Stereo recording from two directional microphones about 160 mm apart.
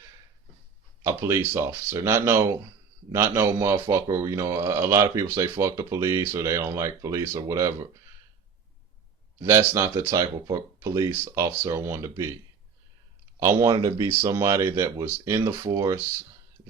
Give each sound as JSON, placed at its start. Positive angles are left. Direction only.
{"t": 1.0, "sound": "speech", "side_deg": -20}
{"t": 9.4, "sound": "speech", "side_deg": -15}
{"t": 13.4, "sound": "speech", "side_deg": -20}